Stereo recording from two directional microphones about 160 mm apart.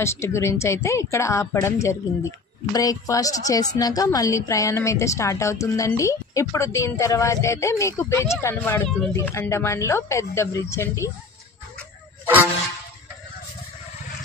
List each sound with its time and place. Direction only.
0.0 s a woman's voice: 15° left (ahead or behind)